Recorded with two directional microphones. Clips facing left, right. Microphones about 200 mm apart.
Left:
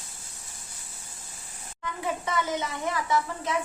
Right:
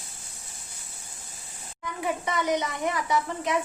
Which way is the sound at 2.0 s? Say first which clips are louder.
Right 1 dB; 15° right (ahead or behind).